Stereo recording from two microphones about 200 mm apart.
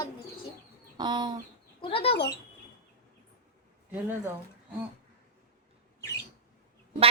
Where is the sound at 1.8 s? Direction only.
30° left (ahead or behind).